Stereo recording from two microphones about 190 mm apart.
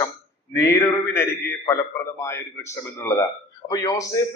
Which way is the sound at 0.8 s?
15° left (ahead or behind).